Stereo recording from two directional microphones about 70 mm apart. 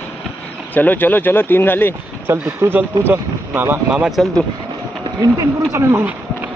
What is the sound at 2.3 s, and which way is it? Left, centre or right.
Speech, right.